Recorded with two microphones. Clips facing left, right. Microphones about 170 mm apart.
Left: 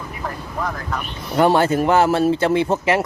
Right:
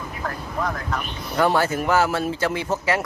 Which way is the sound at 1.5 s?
25° left (ahead or behind).